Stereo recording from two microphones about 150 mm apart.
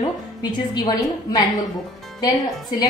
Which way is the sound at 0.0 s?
30° left (ahead or behind).